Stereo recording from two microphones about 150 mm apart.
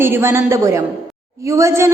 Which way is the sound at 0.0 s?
15° right (ahead or behind).